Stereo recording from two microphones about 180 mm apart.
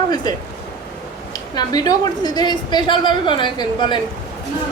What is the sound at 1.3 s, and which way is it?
A woman's voice, 20° left (ahead or behind).